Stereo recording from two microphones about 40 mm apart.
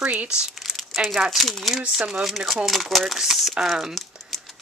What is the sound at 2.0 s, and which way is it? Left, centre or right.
Speech, centre.